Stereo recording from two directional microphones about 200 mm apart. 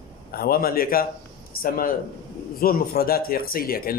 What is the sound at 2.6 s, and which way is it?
Speech, 45° left (ahead or behind).